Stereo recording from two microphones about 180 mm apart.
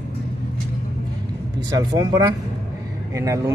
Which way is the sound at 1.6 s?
20° right (ahead or behind).